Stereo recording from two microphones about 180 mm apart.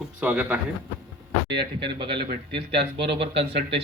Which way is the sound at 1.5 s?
70° right (ahead or behind).